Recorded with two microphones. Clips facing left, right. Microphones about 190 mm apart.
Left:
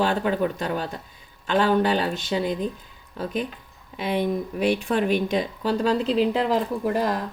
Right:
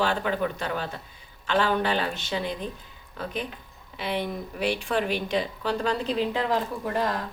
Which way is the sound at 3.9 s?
45° left (ahead or behind).